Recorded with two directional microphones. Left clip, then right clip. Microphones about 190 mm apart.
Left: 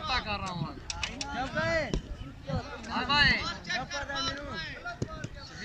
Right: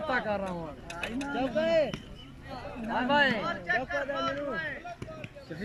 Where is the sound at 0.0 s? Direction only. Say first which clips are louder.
Right 2 dB; 35° right (ahead or behind).